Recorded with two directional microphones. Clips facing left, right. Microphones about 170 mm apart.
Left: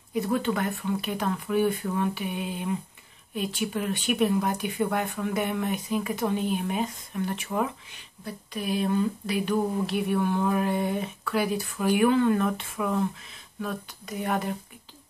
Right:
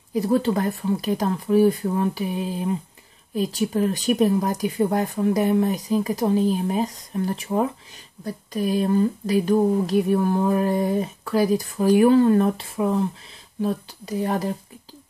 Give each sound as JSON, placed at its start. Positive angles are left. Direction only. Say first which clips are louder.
{"t": 0.1, "sound": "speech", "louder": "right 6 dB", "side_deg": -35}